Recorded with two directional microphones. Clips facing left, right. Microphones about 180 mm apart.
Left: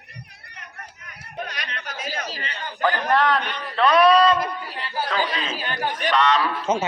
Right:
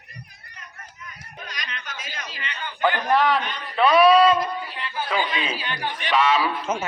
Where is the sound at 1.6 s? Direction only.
35° left (ahead or behind).